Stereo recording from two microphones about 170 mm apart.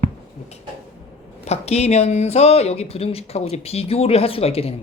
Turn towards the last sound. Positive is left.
turn(degrees=35)  # may be behind; listen again after turning